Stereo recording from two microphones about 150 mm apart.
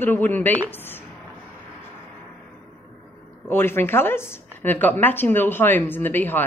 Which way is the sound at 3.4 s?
15° left (ahead or behind).